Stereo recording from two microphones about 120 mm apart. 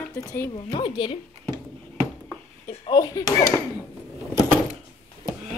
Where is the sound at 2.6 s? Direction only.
40° left (ahead or behind).